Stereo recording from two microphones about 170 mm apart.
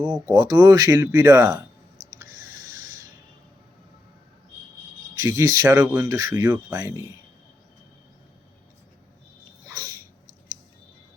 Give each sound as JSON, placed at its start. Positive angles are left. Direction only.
{"t": 0.0, "sound": "speech", "side_deg": -25}
{"t": 5.1, "sound": "speech", "side_deg": -20}